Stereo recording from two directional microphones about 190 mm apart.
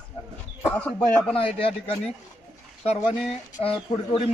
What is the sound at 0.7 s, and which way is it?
Speech, 5° left (ahead or behind).